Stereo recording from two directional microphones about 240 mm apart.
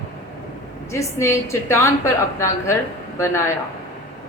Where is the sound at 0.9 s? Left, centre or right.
Centre.